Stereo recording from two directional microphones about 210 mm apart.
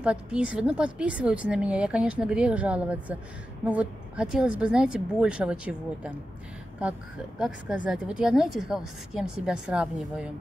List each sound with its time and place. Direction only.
0.0 s a woman's voice: 5° right (ahead or behind)